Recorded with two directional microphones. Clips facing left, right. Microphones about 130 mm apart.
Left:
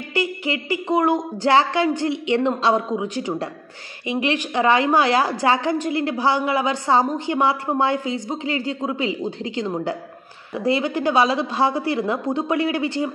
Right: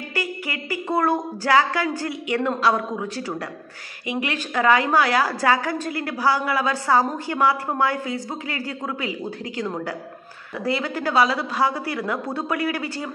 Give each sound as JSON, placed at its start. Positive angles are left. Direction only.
{"t": 0.1, "sound": "a woman's voice", "side_deg": 25}